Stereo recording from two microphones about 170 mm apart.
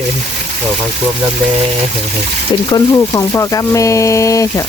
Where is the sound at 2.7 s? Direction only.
20° left (ahead or behind).